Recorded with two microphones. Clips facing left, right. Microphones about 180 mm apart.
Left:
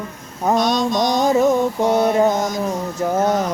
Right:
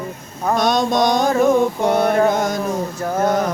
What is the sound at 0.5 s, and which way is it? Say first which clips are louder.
Mantra: right 2 dB; 50° right (ahead or behind).